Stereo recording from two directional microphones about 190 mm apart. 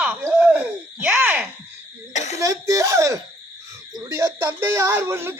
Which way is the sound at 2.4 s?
15° right (ahead or behind).